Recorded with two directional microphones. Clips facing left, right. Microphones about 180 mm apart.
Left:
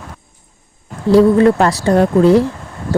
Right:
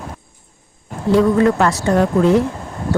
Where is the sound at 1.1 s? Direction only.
35° left (ahead or behind).